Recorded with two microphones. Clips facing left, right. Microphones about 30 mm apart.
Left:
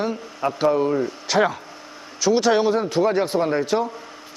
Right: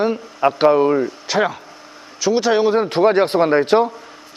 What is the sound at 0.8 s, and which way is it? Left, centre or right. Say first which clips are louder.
Speech: right 5 dB; right.